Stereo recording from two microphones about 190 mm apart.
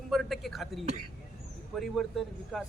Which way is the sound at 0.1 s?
Centre (ahead or behind).